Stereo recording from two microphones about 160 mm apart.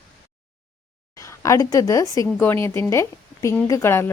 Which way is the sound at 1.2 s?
20° left (ahead or behind).